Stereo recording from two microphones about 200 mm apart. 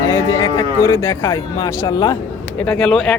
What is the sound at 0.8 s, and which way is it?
Speech, 15° left (ahead or behind).